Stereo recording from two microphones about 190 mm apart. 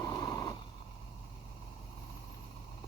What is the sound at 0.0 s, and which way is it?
Vehicle, 15° left (ahead or behind).